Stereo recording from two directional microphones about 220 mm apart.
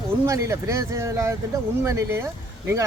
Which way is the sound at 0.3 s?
15° right (ahead or behind).